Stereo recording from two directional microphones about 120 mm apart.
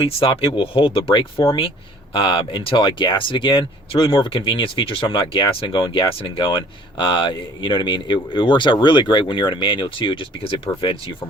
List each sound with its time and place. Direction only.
0.0 s speech: 50° left (ahead or behind)